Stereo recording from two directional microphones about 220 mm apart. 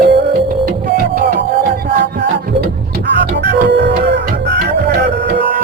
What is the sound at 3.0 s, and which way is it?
Music, 55° right (ahead or behind).